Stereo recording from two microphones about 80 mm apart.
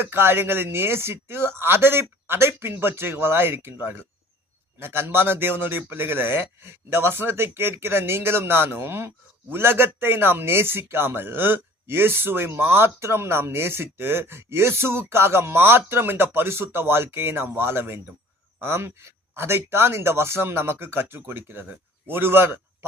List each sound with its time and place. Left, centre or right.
0.0 s a man's voice: right